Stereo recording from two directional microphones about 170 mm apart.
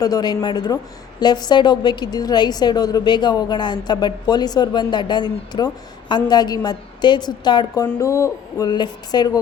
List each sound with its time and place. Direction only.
0.0 s a woman's voice: 25° left (ahead or behind)